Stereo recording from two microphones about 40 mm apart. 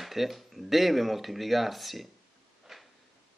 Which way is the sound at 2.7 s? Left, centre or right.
Centre.